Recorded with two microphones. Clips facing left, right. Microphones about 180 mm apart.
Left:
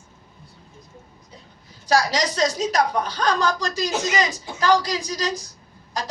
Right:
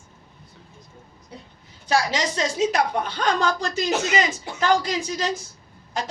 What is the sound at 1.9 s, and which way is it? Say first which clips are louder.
A woman's voice: left 2 dB; 40° left (ahead or behind).